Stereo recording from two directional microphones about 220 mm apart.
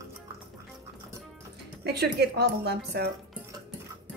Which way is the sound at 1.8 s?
50° right (ahead or behind).